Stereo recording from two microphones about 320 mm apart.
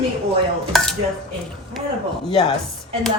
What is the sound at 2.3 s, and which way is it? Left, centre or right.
Speech, centre.